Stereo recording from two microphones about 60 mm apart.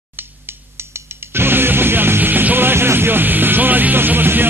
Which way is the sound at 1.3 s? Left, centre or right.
Right.